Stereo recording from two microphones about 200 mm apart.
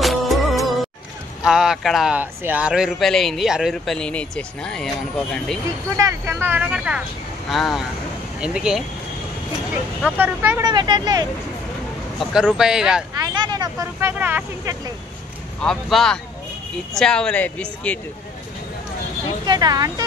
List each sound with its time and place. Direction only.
0.0 s music: centre (ahead or behind)
1.4 s a man's voice: 5° right (ahead or behind)
5.9 s a man's voice: 15° right (ahead or behind)
10.0 s speech: 10° right (ahead or behind)
10.6 s speech: 20° right (ahead or behind)
12.2 s a man's voice: 5° right (ahead or behind)
13.2 s speech: 20° right (ahead or behind)
15.6 s a man's voice: centre (ahead or behind)
19.4 s speech: 20° right (ahead or behind)